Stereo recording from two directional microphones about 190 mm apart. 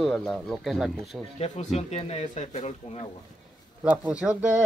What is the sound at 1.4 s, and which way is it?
Speech, 35° left (ahead or behind).